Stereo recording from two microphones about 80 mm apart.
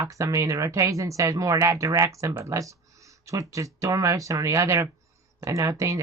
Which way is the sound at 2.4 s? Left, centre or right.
Right.